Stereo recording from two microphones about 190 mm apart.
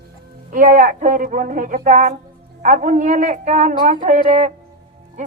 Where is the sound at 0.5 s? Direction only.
50° right (ahead or behind).